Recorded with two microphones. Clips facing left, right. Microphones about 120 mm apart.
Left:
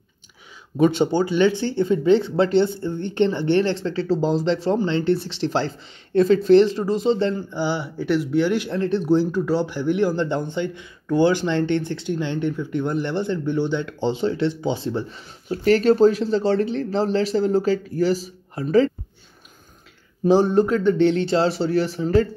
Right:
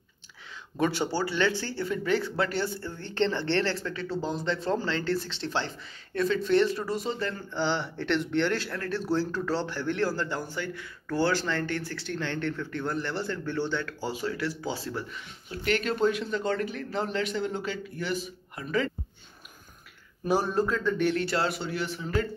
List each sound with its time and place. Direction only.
0.7 s speech: 20° left (ahead or behind)
4.2 s speech: 90° left
4.6 s speech: 20° left (ahead or behind)
7.5 s speech: 10° left (ahead or behind); by 18.9 s 30° left (ahead or behind)
20.2 s speech: 25° left (ahead or behind)